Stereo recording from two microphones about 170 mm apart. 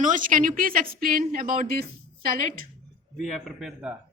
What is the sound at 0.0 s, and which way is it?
A woman's voice, 50° right (ahead or behind).